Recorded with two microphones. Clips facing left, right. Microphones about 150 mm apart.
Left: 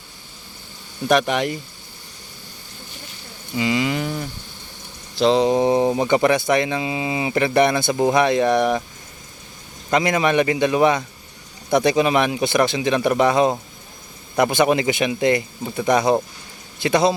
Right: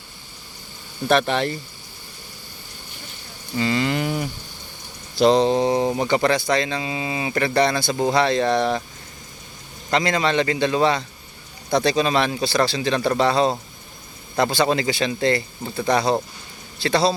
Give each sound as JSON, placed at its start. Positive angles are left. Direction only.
{"t": 1.3, "sound": "speech", "side_deg": 15}
{"t": 3.5, "sound": "speech", "side_deg": 10}
{"t": 4.0, "sound": "moo", "side_deg": -10}
{"t": 5.1, "sound": "speech", "side_deg": 0}
{"t": 5.4, "sound": "speech", "side_deg": 15}
{"t": 9.9, "sound": "speech", "side_deg": 20}